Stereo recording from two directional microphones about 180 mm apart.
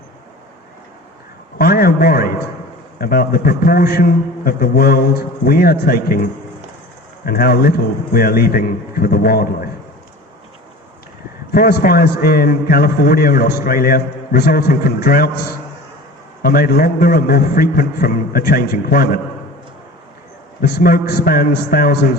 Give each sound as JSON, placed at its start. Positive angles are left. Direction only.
{"t": 1.5, "sound": "a man's voice", "side_deg": 55}
{"t": 7.3, "sound": "a man's voice", "side_deg": 55}
{"t": 11.5, "sound": "a man's voice", "side_deg": 55}
{"t": 20.6, "sound": "a man's voice", "side_deg": 60}